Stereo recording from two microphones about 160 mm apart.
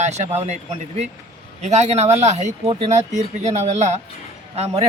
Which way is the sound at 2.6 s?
35° right (ahead or behind).